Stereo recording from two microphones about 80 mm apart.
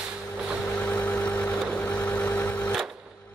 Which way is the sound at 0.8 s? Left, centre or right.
Left.